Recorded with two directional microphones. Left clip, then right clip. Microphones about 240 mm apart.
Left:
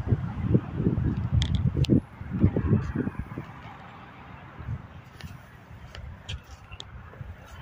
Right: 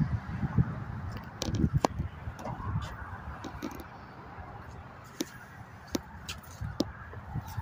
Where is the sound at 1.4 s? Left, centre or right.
Right.